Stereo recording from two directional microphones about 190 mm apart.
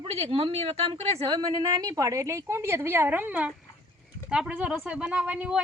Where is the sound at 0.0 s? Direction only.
30° right (ahead or behind).